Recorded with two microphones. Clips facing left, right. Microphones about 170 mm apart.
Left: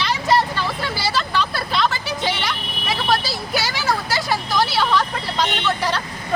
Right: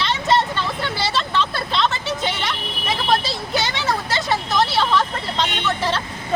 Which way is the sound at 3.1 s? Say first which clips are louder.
Right 1 dB; 25° right (ahead or behind).